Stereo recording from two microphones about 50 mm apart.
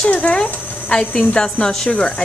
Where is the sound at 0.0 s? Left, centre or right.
Left.